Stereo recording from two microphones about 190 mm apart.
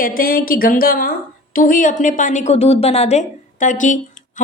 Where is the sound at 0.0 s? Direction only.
50° left (ahead or behind).